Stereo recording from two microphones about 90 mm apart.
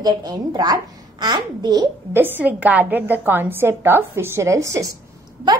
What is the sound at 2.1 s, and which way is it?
A woman's voice, 20° right (ahead or behind).